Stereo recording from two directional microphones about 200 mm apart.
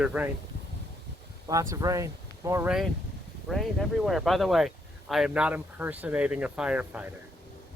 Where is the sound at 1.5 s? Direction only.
15° right (ahead or behind).